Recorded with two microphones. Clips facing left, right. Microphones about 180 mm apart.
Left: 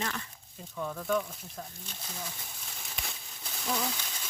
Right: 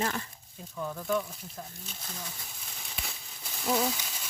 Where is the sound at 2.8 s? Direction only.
Centre (ahead or behind).